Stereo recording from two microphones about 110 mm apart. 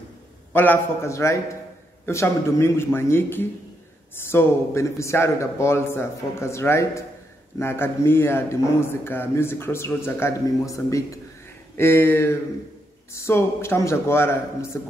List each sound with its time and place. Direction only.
0.5 s speech: 20° left (ahead or behind)